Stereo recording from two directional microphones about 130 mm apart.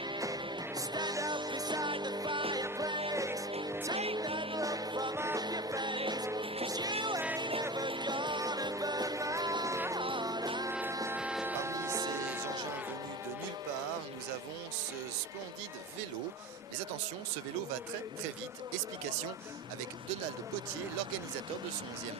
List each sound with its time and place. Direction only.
0.9 s music: 30° right (ahead or behind)
2.6 s music: 25° right (ahead or behind)
2.9 s music: 35° right (ahead or behind)
3.2 s music: 25° right (ahead or behind)
3.9 s music: 50° right (ahead or behind)
4.5 s music: 30° right (ahead or behind)
5.1 s music: 20° right (ahead or behind)
10.0 s music: 40° right (ahead or behind)
10.7 s music: 20° right (ahead or behind)
11.2 s hum: 5° right (ahead or behind)
11.5 s music: 20° right (ahead or behind)
12.3 s vehicle: 20° right (ahead or behind)